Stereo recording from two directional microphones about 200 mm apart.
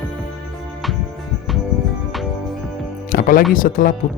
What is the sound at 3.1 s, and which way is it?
Music, 45° left (ahead or behind).